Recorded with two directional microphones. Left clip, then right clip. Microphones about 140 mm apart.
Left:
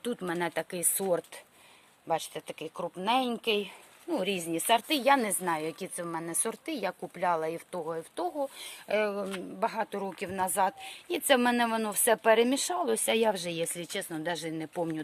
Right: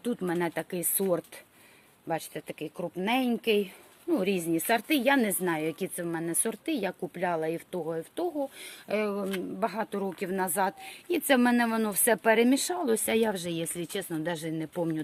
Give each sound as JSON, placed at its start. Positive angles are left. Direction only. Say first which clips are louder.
{"t": 0.0, "sound": "speech", "louder": "right 2 dB", "side_deg": 15}